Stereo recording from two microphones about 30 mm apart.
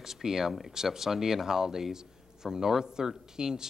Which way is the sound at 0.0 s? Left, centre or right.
Centre.